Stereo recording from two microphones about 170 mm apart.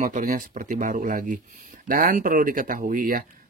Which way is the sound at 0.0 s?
50° right (ahead or behind).